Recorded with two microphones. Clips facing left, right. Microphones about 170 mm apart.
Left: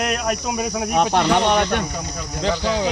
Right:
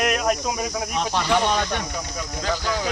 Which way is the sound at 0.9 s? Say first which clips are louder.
Left 6 dB; 60° left (ahead or behind).